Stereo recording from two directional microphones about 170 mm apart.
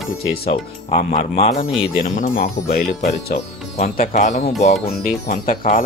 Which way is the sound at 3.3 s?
45° left (ahead or behind).